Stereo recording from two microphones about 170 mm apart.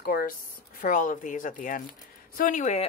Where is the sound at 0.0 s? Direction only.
60° left (ahead or behind).